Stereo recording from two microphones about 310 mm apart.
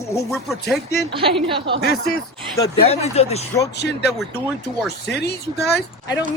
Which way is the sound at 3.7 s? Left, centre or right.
Left.